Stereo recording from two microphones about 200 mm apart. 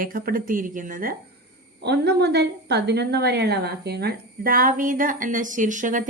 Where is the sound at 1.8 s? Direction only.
55° right (ahead or behind).